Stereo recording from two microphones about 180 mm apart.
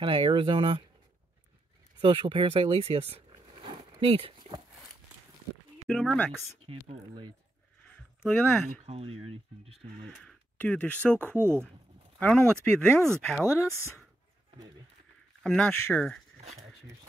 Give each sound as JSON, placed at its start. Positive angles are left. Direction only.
{"t": 0.0, "sound": "speech", "side_deg": -25}
{"t": 2.0, "sound": "speech", "side_deg": -25}
{"t": 5.9, "sound": "speech", "side_deg": 5}
{"t": 6.6, "sound": "speech", "side_deg": -30}
{"t": 8.3, "sound": "speech", "side_deg": 10}
{"t": 8.8, "sound": "speech", "side_deg": -35}
{"t": 10.0, "sound": "speech", "side_deg": 5}
{"t": 11.3, "sound": "speech", "side_deg": -15}
{"t": 12.2, "sound": "speech", "side_deg": 5}
{"t": 15.4, "sound": "speech", "side_deg": 5}